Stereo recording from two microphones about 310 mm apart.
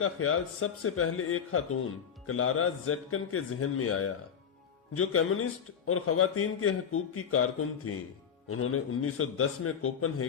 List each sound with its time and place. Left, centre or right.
0.0 s a man's voice: left